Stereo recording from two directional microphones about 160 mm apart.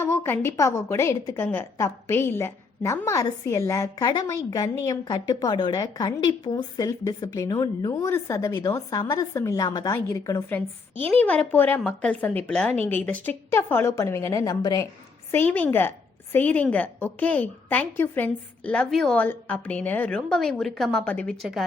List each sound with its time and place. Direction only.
0.0 s a woman's voice: 15° left (ahead or behind)
15.3 s a woman's voice: 10° left (ahead or behind)